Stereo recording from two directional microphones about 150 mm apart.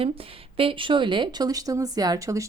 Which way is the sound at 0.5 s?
35° right (ahead or behind).